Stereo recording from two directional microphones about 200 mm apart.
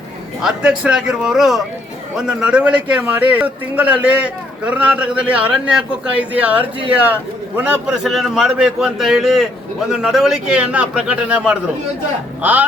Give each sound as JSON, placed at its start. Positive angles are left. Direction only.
{"t": 0.4, "sound": "a man's voice", "side_deg": -5}